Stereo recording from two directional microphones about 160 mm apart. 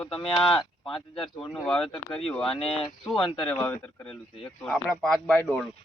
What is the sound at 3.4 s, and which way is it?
Speech, 10° left (ahead or behind).